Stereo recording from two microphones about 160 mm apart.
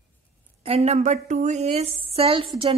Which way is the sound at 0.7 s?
40° right (ahead or behind).